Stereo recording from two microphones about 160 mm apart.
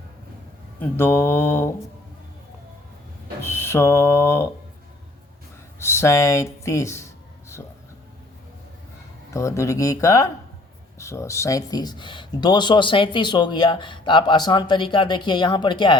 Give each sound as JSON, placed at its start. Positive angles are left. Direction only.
{"t": 0.8, "sound": "speech", "side_deg": 15}
{"t": 3.4, "sound": "speech", "side_deg": 15}
{"t": 5.8, "sound": "speech", "side_deg": 15}
{"t": 9.3, "sound": "speech", "side_deg": 20}